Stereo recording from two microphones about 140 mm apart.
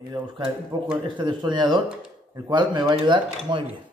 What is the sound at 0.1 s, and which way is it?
Speech, 30° right (ahead or behind).